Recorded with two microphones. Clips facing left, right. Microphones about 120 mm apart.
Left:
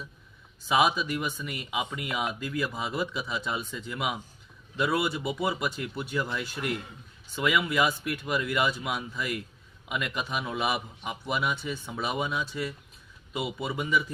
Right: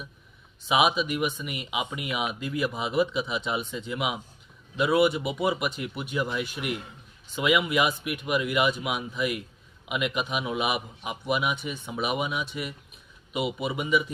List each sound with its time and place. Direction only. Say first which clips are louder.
0.7 s a man's voice: right 1 dB; 20° right (ahead or behind)